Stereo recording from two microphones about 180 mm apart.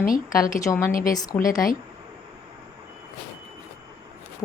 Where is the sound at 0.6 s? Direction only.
15° left (ahead or behind).